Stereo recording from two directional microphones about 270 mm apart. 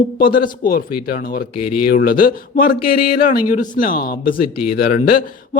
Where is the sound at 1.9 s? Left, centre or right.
Left.